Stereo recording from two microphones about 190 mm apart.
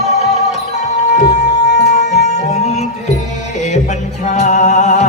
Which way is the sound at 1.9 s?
40° left (ahead or behind).